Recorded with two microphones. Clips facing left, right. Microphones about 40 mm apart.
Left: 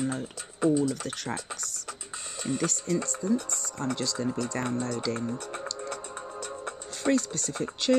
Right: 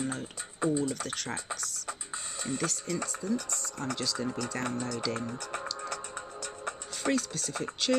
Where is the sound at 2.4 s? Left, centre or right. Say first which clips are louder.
Left 4 dB; centre.